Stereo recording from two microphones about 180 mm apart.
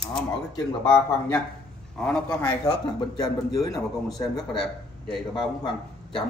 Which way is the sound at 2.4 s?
20° left (ahead or behind).